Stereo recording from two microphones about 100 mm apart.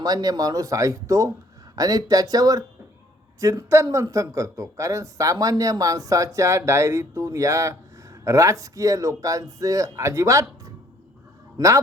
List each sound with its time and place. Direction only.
0.0 s speech: 40° right (ahead or behind)
11.5 s a man's voice: 35° right (ahead or behind)